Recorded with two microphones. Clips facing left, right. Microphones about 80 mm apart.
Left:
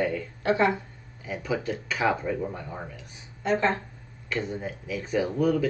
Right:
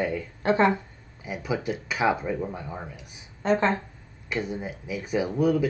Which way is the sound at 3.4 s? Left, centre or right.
Right.